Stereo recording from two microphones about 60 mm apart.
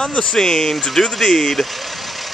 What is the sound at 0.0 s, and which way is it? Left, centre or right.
Speech, centre.